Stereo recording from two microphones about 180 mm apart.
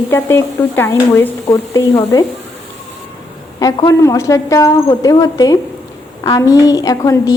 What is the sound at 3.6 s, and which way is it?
A woman's voice, 20° left (ahead or behind).